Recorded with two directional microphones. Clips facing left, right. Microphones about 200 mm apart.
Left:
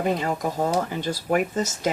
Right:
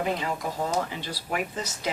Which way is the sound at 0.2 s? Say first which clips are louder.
Left 5 dB; 45° left (ahead or behind).